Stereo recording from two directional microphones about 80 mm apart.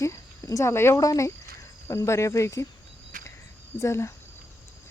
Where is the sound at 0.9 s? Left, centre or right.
Left.